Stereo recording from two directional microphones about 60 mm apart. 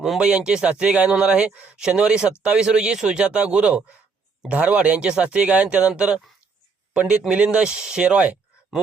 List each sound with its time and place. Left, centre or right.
0.2 s a man's voice: centre
6.9 s speech: centre